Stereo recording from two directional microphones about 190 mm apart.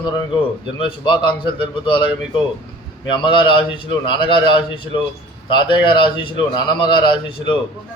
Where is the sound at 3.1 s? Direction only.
25° left (ahead or behind).